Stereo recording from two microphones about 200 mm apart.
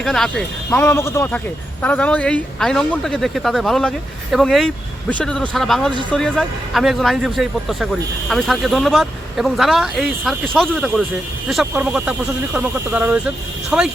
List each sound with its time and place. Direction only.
0.0 s speech: 5° left (ahead or behind)